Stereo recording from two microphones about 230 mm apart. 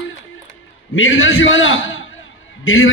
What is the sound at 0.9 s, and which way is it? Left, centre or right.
Speech, left.